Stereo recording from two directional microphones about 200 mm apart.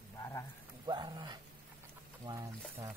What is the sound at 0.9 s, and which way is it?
Speech, 20° right (ahead or behind).